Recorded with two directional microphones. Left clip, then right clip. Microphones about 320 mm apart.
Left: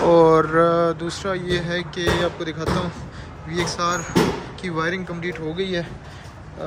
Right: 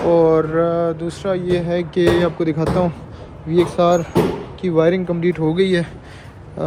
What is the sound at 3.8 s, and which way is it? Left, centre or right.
A man's voice, centre.